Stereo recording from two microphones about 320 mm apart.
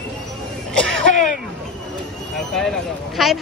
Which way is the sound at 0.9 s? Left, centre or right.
Right.